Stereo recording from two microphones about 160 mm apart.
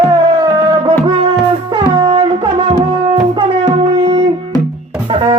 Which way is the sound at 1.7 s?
30° right (ahead or behind).